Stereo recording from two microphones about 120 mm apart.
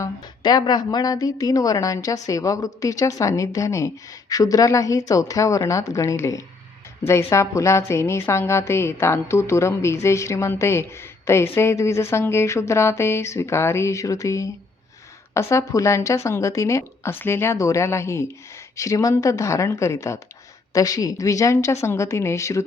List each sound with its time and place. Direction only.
0.0 s a woman's voice: 35° left (ahead or behind)